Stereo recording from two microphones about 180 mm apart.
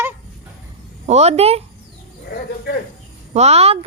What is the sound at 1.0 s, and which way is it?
Speech, 35° right (ahead or behind).